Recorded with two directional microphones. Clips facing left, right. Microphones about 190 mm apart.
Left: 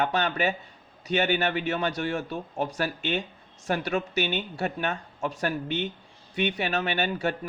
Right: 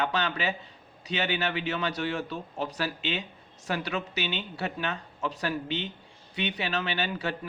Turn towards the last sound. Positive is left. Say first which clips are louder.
# left 4 dB
turn(degrees=50)  # may be behind; listen again after turning